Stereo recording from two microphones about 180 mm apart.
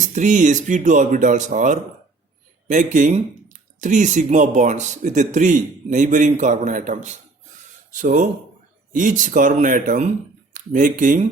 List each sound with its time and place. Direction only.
0.1 s speech: 45° right (ahead or behind)